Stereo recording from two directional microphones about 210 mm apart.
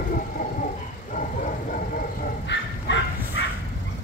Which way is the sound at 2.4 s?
55° left (ahead or behind).